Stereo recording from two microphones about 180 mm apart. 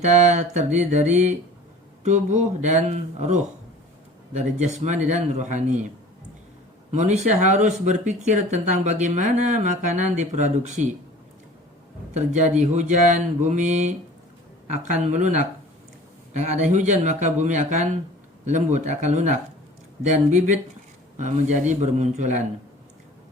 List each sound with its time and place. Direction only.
0.0 s speech: 40° right (ahead or behind)
4.4 s speech: 40° right (ahead or behind)
6.9 s speech: 40° right (ahead or behind)
12.1 s speech: 40° right (ahead or behind)
15.0 s speech: 40° right (ahead or behind)